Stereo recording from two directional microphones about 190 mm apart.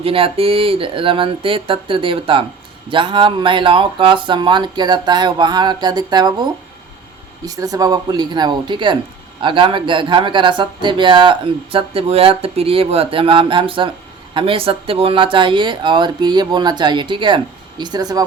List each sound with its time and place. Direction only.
0.0 s speech: 30° right (ahead or behind)